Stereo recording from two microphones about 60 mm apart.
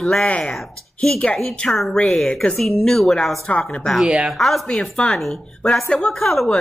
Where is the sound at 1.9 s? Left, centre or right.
Centre.